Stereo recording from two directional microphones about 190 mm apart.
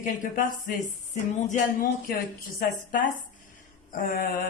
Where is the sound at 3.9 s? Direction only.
45° left (ahead or behind).